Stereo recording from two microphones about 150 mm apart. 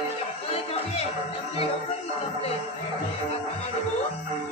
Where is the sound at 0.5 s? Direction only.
40° left (ahead or behind).